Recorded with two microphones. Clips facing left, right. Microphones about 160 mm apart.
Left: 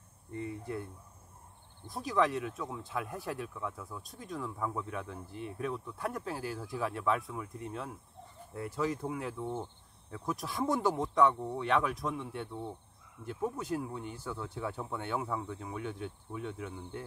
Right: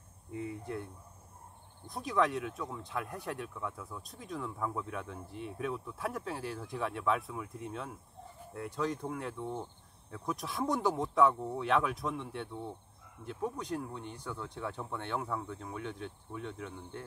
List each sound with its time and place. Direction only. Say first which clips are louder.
0.3 s speech: even; centre (ahead or behind)
1.9 s speech: left 1 dB; centre (ahead or behind)